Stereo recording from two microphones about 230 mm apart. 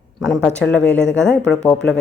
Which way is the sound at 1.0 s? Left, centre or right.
Left.